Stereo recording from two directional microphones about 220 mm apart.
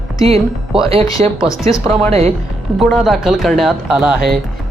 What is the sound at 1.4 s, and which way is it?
Speech, 15° left (ahead or behind).